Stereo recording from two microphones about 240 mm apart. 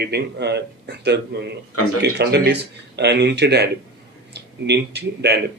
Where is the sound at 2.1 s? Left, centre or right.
Right.